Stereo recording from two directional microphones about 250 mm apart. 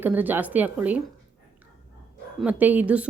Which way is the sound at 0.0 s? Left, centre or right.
Centre.